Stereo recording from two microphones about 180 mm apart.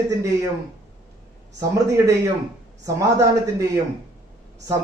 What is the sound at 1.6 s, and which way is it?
Speech, 15° right (ahead or behind).